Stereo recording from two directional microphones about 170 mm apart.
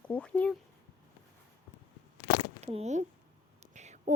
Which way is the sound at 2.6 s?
40° right (ahead or behind).